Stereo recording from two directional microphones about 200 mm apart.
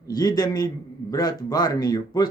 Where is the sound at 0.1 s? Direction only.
20° left (ahead or behind).